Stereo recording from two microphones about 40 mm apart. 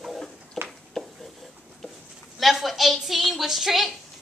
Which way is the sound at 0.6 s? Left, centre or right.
Centre.